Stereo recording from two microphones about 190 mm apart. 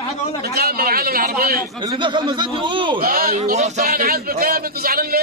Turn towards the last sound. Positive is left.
turn(degrees=-50)  # may be behind; listen again after turning